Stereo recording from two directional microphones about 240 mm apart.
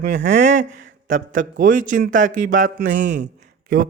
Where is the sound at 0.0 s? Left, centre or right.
Right.